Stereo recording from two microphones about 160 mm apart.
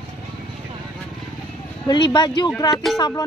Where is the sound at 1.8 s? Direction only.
25° left (ahead or behind).